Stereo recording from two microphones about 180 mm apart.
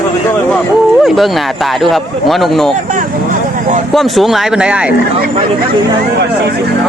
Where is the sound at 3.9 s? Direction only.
Centre (ahead or behind).